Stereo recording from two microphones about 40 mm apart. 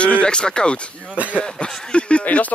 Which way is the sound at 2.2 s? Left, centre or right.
Left.